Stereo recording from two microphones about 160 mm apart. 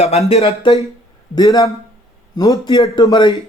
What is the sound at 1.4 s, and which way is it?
A man's voice, 20° left (ahead or behind).